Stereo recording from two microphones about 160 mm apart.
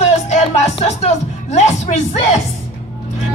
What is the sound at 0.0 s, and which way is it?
Music, 45° left (ahead or behind).